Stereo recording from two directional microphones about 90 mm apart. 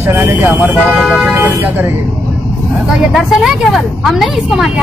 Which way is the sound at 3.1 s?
Centre (ahead or behind).